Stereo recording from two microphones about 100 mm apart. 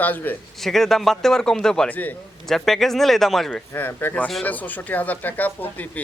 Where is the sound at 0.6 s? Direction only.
5° left (ahead or behind).